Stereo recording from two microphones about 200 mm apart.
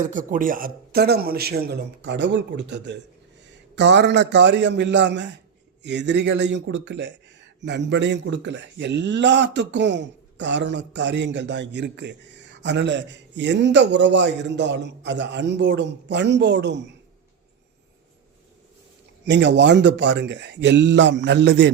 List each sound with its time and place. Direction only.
0.1 s a man's voice: 40° right (ahead or behind); by 16.9 s 60° right (ahead or behind)
19.2 s speech: 60° right (ahead or behind)